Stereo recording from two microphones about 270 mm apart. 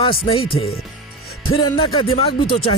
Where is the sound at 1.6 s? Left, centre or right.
Centre.